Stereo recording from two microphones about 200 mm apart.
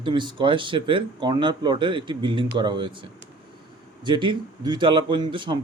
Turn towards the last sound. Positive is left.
turn(degrees=-25)  # may be behind; listen again after turning